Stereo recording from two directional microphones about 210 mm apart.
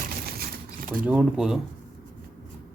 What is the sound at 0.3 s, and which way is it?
Typewriter, 40° right (ahead or behind).